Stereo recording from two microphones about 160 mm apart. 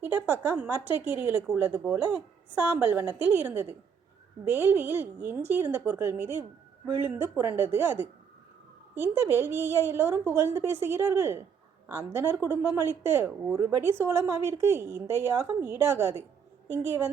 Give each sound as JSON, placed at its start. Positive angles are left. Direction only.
{"t": 0.0, "sound": "speech", "side_deg": -15}
{"t": 9.1, "sound": "speech", "side_deg": -15}